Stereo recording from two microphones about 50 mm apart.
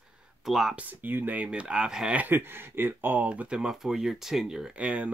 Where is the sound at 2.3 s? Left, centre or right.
Right.